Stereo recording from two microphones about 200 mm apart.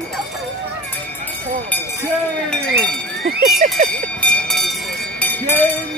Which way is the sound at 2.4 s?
5° left (ahead or behind).